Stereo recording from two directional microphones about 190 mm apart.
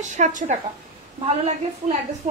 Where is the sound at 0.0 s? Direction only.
40° right (ahead or behind).